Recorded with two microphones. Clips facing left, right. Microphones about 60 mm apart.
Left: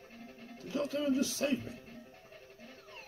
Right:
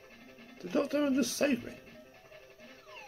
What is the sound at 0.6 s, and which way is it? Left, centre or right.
Speech, right.